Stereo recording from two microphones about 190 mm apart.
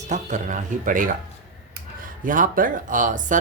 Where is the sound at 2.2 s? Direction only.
45° right (ahead or behind).